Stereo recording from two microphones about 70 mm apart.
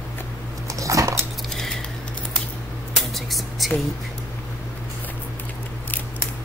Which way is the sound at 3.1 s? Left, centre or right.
Centre.